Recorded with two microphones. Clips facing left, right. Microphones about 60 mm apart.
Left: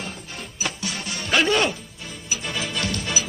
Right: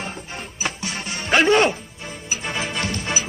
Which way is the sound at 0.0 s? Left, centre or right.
Right.